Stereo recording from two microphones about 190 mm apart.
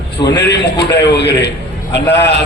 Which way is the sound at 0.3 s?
65° left (ahead or behind).